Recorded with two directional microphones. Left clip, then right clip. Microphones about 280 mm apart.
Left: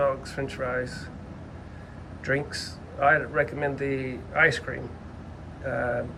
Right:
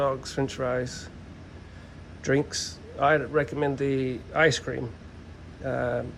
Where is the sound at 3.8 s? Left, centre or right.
Right.